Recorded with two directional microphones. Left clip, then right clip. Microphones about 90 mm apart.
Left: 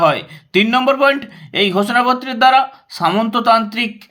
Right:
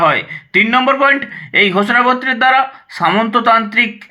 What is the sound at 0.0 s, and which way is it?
Speech, 25° left (ahead or behind).